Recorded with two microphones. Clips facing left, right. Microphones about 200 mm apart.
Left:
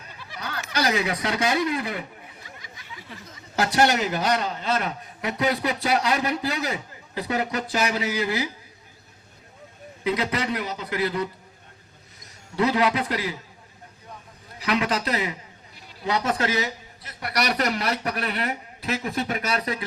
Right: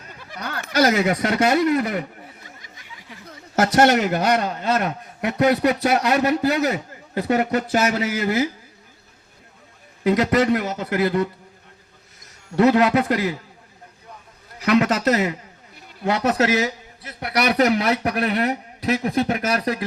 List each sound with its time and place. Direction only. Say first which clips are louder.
0.1 s a sound: right 3 dB; 50° right (ahead or behind)
2.8 s a sound: left 2 dB; 15° right (ahead or behind)
3.2 s a man's voice: right 5 dB; 45° right (ahead or behind)
10.0 s a man's voice: right 8 dB; 45° right (ahead or behind)
12.5 s a man's voice: right 6 dB; 50° right (ahead or behind)
14.6 s a man's voice: right 7 dB; 50° right (ahead or behind); by 16.6 s 70° right (ahead or behind)
17.0 s a man's voice: right 5 dB; 60° right (ahead or behind)
18.3 s a man's voice: right 7 dB; 40° right (ahead or behind)